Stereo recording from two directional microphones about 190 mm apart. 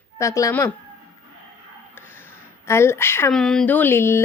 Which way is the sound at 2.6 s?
15° left (ahead or behind).